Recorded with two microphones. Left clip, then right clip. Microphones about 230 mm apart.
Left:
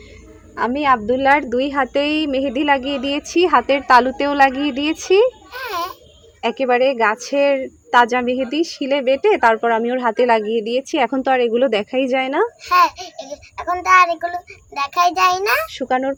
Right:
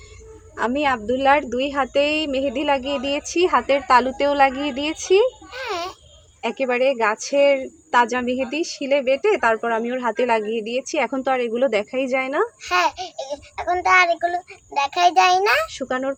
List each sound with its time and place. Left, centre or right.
0.5 s speech: left
5.5 s a sound: centre
6.4 s speech: left
12.6 s a child's voice: centre
15.7 s speech: left